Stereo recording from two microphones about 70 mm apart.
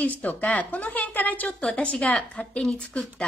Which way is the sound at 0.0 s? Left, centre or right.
Left.